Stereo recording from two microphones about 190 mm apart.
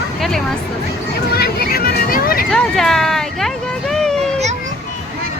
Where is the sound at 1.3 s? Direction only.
55° left (ahead or behind).